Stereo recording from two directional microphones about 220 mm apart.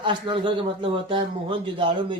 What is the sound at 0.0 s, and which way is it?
Speech, 20° right (ahead or behind).